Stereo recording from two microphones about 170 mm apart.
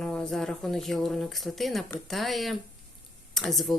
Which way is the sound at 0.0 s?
5° left (ahead or behind).